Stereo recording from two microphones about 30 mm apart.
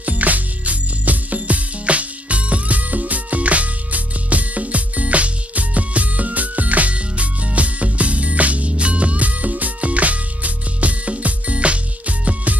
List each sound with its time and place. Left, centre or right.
0.0 s music: right
7.0 s music: right